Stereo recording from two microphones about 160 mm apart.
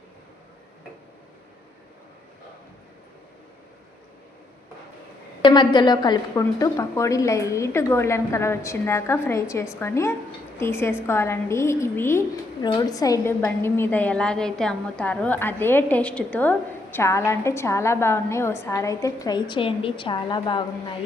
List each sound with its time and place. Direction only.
5.4 s a woman's voice: 30° left (ahead or behind)